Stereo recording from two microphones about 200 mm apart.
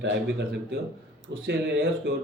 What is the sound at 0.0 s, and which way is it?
Speech, 60° right (ahead or behind).